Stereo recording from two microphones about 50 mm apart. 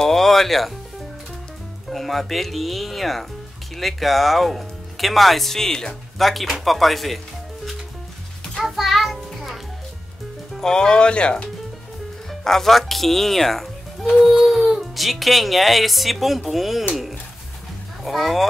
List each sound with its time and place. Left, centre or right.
0.0 s speech: centre
1.9 s speech: centre
6.1 s speech: centre
8.5 s music: centre
10.6 s speech: centre
12.3 s speech: centre
14.2 s speech: centre
18.0 s speech: centre